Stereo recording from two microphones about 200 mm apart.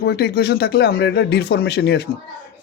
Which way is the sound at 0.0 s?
55° left (ahead or behind).